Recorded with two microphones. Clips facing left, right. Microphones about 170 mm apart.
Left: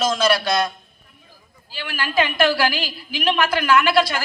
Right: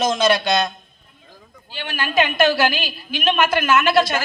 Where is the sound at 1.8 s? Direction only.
20° right (ahead or behind).